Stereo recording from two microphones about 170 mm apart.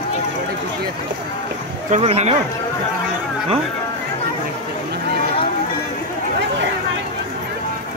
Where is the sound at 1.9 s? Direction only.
40° right (ahead or behind).